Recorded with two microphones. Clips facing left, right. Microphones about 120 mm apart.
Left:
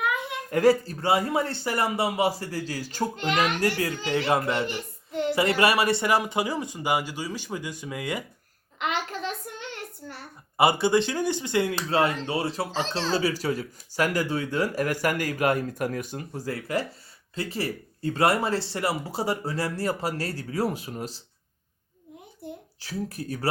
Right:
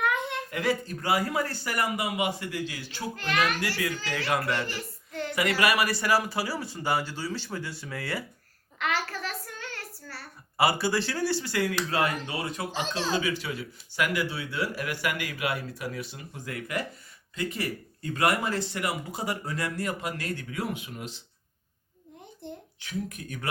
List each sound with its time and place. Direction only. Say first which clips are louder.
0.0 s a sound: even; 5° left (ahead or behind)
0.5 s speech: left 10 dB; 35° left (ahead or behind)
3.2 s a child's voice: left 2 dB; 20° left (ahead or behind)
8.8 s child singing: left 1 dB; 20° left (ahead or behind)
13.1 s speech: left 4 dB; 40° left (ahead or behind)
22.4 s a child's voice: left 2 dB; 5° left (ahead or behind)
22.8 s speech: left 2 dB; 35° left (ahead or behind)